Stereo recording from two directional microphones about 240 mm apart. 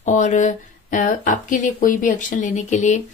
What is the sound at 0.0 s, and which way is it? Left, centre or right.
Speech, left.